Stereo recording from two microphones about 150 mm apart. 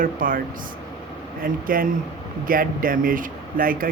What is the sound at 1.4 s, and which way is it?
Speech, 70° right (ahead or behind).